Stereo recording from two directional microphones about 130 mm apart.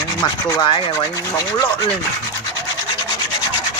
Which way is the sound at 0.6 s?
40° left (ahead or behind).